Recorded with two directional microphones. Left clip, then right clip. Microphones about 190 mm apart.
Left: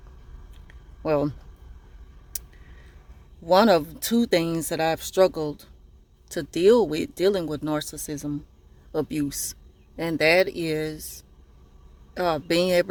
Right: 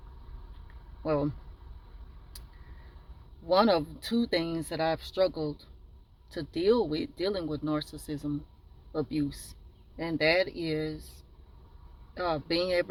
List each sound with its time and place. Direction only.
1.0 s speech: 40° left (ahead or behind)
3.4 s speech: 35° left (ahead or behind)
8.9 s speech: 40° left (ahead or behind)
12.1 s speech: 40° left (ahead or behind)